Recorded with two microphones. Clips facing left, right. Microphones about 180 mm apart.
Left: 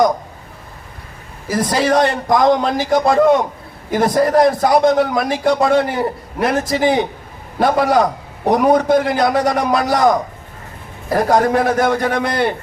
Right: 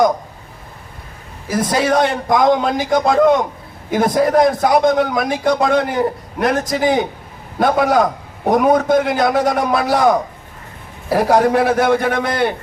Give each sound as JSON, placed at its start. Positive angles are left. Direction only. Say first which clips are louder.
{"t": 1.5, "sound": "a man's voice", "louder": "even", "side_deg": 0}